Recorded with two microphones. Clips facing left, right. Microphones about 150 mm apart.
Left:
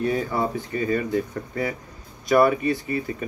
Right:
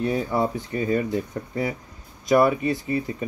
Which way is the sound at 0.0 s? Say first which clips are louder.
Right 1 dB; 20° right (ahead or behind).